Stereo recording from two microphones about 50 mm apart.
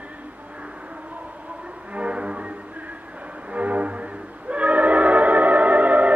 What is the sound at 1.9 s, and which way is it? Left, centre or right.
Music, right.